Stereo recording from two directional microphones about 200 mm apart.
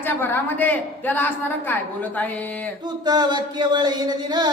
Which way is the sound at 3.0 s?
20° right (ahead or behind).